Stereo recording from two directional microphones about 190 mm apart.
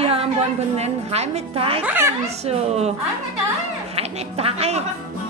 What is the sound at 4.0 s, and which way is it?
Speech, 30° right (ahead or behind).